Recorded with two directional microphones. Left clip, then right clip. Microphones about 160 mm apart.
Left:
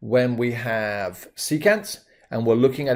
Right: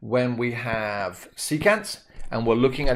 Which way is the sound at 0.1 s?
35° left (ahead or behind).